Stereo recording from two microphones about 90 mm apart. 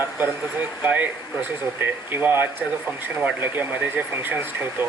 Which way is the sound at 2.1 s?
25° right (ahead or behind).